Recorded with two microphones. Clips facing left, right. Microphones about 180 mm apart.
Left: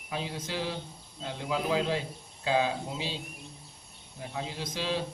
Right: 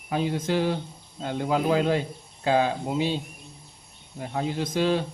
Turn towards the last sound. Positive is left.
turn(degrees=-55)  # may be behind; listen again after turning